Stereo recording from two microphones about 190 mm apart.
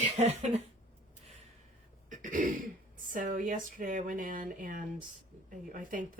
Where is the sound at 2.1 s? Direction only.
40° right (ahead or behind).